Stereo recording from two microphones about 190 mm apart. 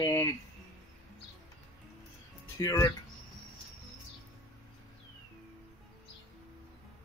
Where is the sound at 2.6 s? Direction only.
20° left (ahead or behind).